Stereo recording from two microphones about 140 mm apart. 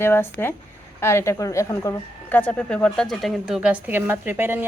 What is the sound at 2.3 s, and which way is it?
Speech, 10° left (ahead or behind).